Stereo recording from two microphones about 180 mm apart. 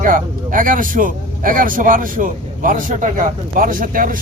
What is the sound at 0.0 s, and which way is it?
A man's voice, 50° right (ahead or behind).